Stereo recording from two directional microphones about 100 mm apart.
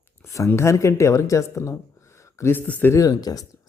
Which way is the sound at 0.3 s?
30° left (ahead or behind).